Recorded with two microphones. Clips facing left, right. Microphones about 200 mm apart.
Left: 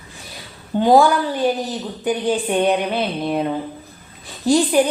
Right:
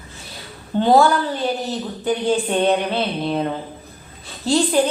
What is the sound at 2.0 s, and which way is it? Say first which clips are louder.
Speech: even; 15° left (ahead or behind).